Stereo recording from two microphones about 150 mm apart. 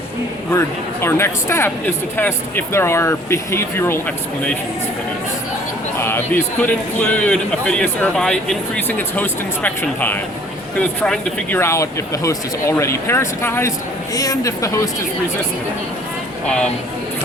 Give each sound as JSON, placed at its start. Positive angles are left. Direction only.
{"t": 1.0, "sound": "speech", "side_deg": 15}
{"t": 6.0, "sound": "speech", "side_deg": 15}
{"t": 11.6, "sound": "speech", "side_deg": 20}